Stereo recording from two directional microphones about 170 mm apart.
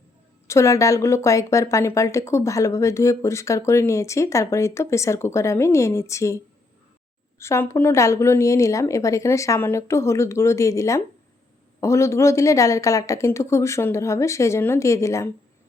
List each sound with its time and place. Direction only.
0.4 s speech: 15° left (ahead or behind)